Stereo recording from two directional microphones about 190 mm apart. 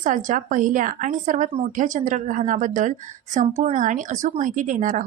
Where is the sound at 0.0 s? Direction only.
40° right (ahead or behind).